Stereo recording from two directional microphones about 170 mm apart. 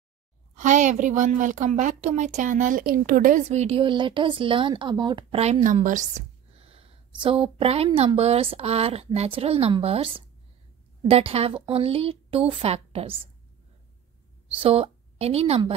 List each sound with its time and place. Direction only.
0.6 s a woman's voice: 45° right (ahead or behind); by 5.4 s 25° right (ahead or behind)
5.4 s a woman's voice: 45° right (ahead or behind)
14.6 s a woman's voice: 35° right (ahead or behind)